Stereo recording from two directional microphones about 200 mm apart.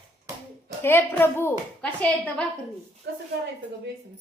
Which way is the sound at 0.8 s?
10° left (ahead or behind).